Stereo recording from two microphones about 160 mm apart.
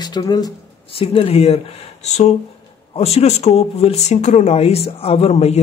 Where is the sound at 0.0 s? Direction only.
25° left (ahead or behind).